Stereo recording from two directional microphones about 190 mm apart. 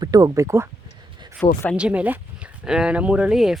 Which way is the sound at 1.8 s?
5° right (ahead or behind).